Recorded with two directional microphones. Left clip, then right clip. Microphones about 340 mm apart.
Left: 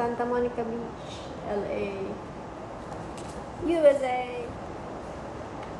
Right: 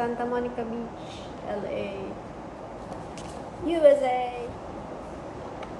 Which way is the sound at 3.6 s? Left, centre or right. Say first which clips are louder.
Right 2 dB; centre.